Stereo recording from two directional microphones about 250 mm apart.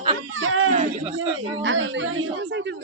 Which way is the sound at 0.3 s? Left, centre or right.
Right.